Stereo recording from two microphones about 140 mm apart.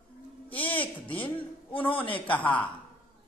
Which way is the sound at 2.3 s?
10° left (ahead or behind).